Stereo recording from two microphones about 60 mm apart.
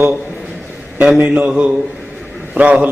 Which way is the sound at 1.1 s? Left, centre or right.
Right.